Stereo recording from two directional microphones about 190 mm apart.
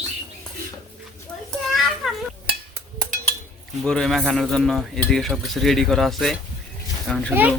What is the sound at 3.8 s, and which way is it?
Speech, 5° left (ahead or behind).